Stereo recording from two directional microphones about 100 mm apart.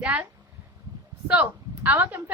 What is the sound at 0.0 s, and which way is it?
Speech, 15° right (ahead or behind).